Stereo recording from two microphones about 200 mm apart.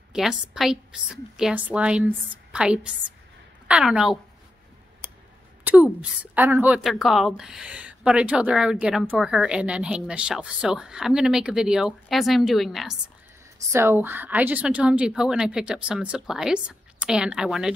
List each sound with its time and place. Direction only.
0.1 s speech: centre (ahead or behind)
5.7 s a sound: 10° right (ahead or behind)
6.3 s speech: 10° right (ahead or behind)
13.7 s speech: 15° right (ahead or behind)